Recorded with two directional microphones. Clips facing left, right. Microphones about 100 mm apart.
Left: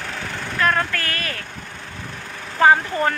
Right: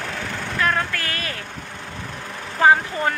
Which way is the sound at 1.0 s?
20° right (ahead or behind).